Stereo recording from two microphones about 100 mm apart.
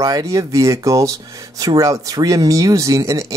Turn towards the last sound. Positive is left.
turn(degrees=-35)  # may be behind; listen again after turning